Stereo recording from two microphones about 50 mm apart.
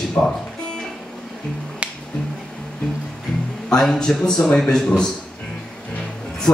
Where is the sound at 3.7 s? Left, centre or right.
Centre.